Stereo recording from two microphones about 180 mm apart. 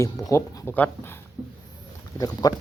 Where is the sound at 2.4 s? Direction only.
20° left (ahead or behind).